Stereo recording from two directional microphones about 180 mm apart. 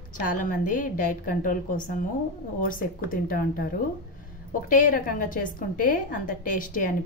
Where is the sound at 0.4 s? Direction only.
45° left (ahead or behind).